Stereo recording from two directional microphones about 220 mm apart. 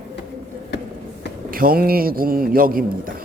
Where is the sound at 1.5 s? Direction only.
40° right (ahead or behind).